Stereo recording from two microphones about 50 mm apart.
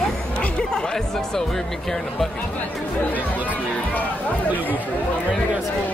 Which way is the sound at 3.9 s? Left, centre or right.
Left.